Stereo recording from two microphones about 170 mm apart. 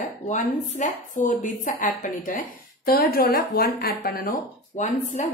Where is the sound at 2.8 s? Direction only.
60° left (ahead or behind).